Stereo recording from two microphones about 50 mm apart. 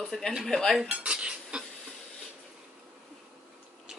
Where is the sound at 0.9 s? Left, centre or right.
Right.